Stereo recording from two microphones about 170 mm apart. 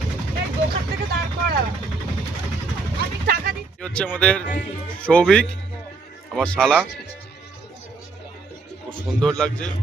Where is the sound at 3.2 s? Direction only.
60° right (ahead or behind).